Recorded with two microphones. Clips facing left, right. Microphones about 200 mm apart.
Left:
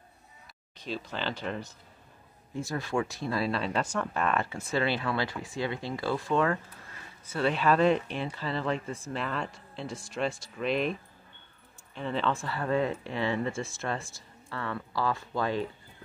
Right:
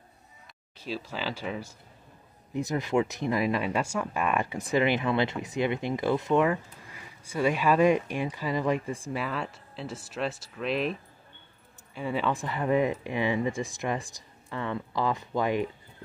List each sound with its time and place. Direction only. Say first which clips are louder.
0.7 s speech: right 1 dB; 5° right (ahead or behind)
2.5 s speech: right 4 dB; 20° right (ahead or behind)